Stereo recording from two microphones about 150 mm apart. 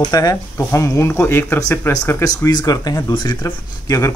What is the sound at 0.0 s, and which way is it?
Speech, 25° left (ahead or behind).